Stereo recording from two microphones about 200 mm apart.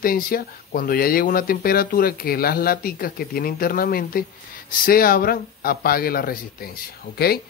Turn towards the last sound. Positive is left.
turn(degrees=50)  # may be behind; listen again after turning